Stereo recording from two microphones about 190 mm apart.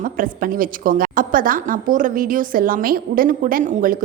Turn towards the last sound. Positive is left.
turn(degrees=-45)  # may be behind; listen again after turning